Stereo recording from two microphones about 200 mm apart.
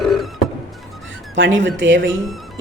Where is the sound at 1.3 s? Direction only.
70° right (ahead or behind).